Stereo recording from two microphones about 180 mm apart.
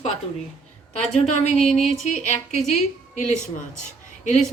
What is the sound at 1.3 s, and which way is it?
A woman's voice, 35° left (ahead or behind).